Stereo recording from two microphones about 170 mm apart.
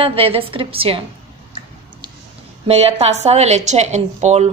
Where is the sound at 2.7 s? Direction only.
35° right (ahead or behind).